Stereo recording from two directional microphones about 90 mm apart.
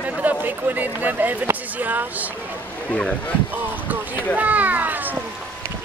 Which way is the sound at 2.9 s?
10° left (ahead or behind).